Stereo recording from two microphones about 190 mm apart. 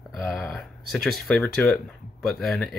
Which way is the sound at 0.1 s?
5° left (ahead or behind).